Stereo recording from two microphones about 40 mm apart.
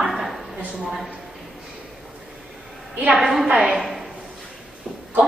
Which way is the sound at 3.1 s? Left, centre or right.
Centre.